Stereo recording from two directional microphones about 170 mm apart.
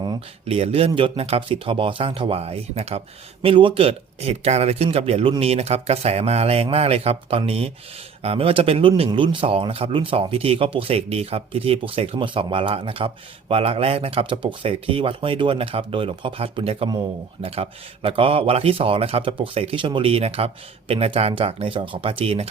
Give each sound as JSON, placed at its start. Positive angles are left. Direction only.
{"t": 0.0, "sound": "speech", "side_deg": -30}